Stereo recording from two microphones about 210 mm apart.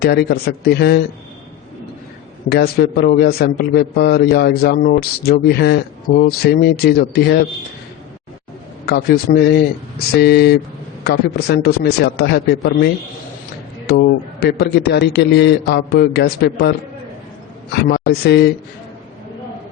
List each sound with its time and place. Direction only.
0.0 s a man's voice: 50° left (ahead or behind)
2.5 s a man's voice: 50° left (ahead or behind)
8.9 s a man's voice: 50° left (ahead or behind)
17.8 s a man's voice: 50° left (ahead or behind)